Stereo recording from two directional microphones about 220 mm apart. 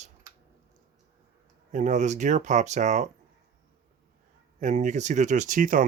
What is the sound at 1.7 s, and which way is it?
Speech, 35° right (ahead or behind).